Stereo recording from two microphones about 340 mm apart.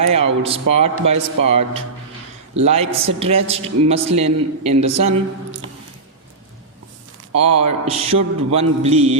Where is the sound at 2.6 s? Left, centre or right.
Centre.